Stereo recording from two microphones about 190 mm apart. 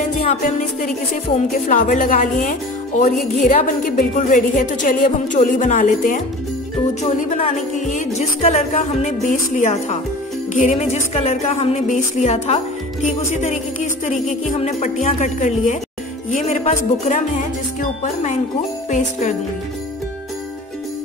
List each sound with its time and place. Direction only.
0.3 s speech: 45° left (ahead or behind)
14.1 s music: centre (ahead or behind)
14.6 s speech: 40° left (ahead or behind)